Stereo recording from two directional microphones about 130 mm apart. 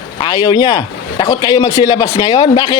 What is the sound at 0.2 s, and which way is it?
Speech, 35° left (ahead or behind).